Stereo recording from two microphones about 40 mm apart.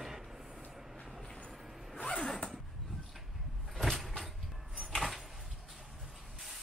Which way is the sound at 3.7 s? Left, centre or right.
Centre.